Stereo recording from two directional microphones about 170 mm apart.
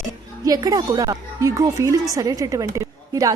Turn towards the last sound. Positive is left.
turn(degrees=-20)  # may be behind; listen again after turning